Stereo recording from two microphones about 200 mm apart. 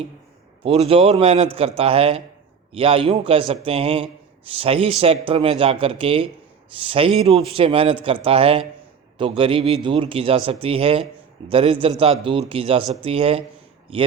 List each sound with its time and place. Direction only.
0.6 s a man's voice: 30° right (ahead or behind)